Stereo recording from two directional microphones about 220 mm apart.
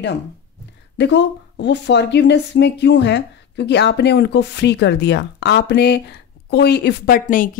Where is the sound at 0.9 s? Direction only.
50° left (ahead or behind).